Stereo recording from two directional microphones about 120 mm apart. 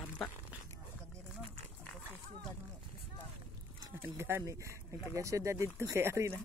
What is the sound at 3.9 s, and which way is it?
Speech, 20° right (ahead or behind).